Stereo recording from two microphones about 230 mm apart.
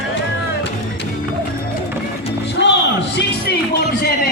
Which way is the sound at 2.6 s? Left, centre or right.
Left.